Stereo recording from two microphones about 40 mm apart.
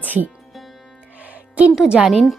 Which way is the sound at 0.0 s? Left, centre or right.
Right.